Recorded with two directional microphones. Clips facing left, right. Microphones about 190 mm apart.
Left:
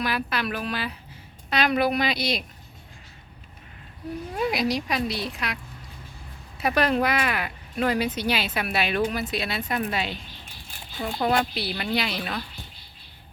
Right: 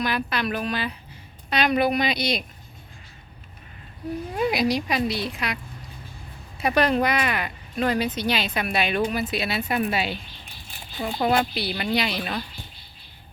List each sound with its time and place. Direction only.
0.0 s speech: 5° left (ahead or behind)
4.4 s speech: centre (ahead or behind)
6.6 s speech: centre (ahead or behind)